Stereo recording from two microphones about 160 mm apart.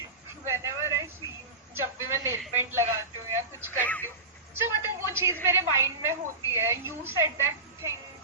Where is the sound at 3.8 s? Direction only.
10° left (ahead or behind).